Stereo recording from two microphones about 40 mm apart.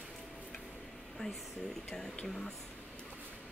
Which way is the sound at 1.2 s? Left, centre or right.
Left.